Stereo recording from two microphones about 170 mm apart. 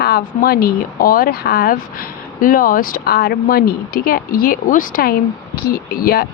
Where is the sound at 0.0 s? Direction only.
65° left (ahead or behind).